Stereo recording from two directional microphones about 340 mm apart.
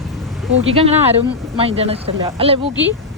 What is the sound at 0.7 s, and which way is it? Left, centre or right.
Speech, centre.